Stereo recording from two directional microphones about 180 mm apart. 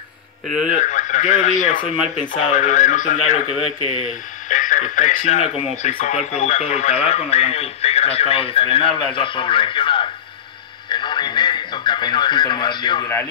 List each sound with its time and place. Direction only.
0.5 s speech: 5° right (ahead or behind)
0.7 s speech: 45° left (ahead or behind)
4.5 s speech: 45° left (ahead or behind); by 10.0 s 30° left (ahead or behind)
10.9 s radio: 25° left (ahead or behind)